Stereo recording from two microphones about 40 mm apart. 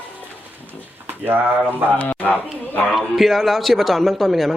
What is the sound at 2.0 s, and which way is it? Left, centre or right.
Speech, left.